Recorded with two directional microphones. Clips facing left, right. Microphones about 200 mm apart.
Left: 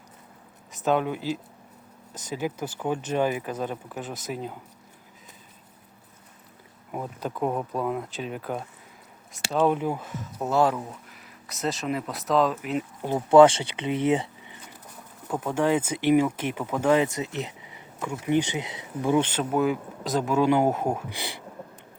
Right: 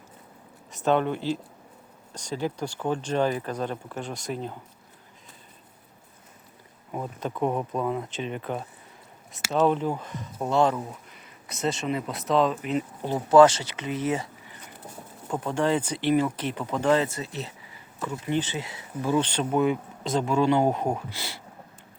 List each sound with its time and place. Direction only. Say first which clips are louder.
0.7 s speech: right 1 dB; centre (ahead or behind)
6.9 s speech: even; 5° left (ahead or behind)
13.1 s speech: left 1 dB; 15° left (ahead or behind)
15.3 s speech: left 1 dB; 5° left (ahead or behind)
19.4 s speech: right 1 dB; centre (ahead or behind)
21.2 s a sound: left 3 dB; 15° left (ahead or behind)